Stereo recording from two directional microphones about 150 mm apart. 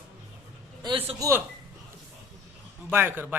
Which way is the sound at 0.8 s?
35° right (ahead or behind).